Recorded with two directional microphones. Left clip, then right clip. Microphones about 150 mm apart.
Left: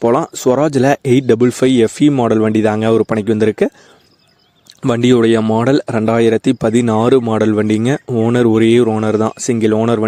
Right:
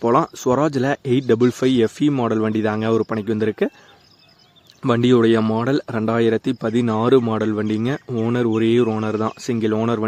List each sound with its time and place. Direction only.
0.0 s speech: 50° left (ahead or behind)
4.9 s speech: 50° left (ahead or behind)